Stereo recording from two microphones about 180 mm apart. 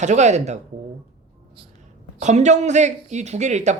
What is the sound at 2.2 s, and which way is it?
A man's voice, 40° right (ahead or behind).